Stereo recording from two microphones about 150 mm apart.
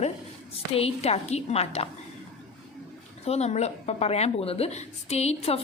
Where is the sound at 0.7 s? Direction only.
40° left (ahead or behind).